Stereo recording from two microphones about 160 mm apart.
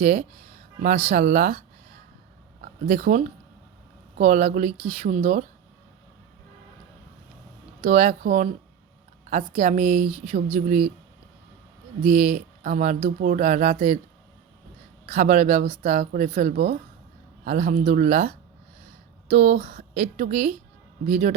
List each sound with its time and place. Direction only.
0.0 s speech: 55° right (ahead or behind)
7.8 s speech: 50° right (ahead or behind)
12.0 s speech: 50° right (ahead or behind)
15.0 s speech: 50° right (ahead or behind)